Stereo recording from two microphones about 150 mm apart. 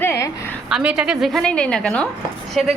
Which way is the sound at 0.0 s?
15° left (ahead or behind).